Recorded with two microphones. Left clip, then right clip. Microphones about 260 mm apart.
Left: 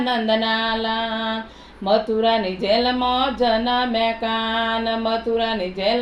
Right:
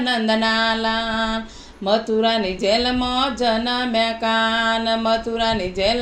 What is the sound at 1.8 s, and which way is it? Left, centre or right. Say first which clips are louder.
Speech: even; right.